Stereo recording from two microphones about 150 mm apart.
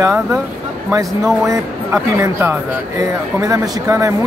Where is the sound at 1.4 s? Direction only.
20° right (ahead or behind).